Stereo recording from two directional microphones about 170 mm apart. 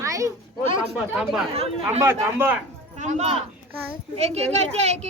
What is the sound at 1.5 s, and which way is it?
Speech, 35° right (ahead or behind).